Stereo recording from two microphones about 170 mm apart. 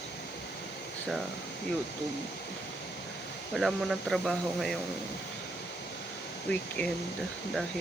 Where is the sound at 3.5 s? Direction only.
Centre (ahead or behind).